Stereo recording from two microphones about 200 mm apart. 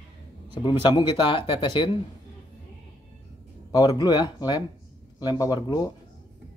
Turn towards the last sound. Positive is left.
turn(degrees=20)  # may be behind; listen again after turning